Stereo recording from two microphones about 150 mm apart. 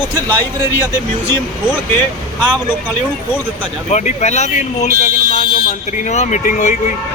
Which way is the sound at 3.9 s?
50° left (ahead or behind).